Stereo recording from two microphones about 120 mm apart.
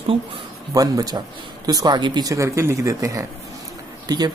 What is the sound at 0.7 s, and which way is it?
Speech, 30° right (ahead or behind).